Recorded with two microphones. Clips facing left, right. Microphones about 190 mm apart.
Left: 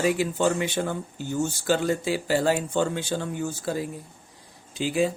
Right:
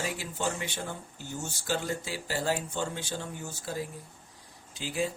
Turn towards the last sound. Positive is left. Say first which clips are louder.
# left 8 dB
turn(degrees=85)